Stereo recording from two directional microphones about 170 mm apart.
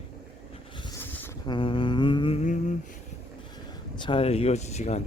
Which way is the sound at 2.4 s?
45° left (ahead or behind).